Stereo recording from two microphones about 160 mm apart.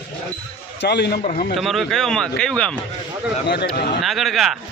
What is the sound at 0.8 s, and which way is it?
Speech, 90° left.